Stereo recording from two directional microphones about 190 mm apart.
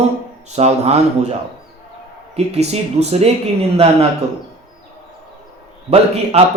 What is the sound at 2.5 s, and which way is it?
Speech, 35° right (ahead or behind).